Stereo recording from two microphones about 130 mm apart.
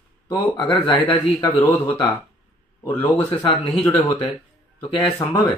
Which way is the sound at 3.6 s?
5° left (ahead or behind).